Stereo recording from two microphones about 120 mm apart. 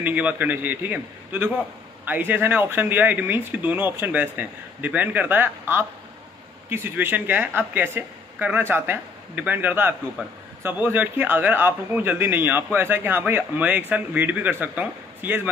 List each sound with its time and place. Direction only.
0.0 s speech: 10° right (ahead or behind)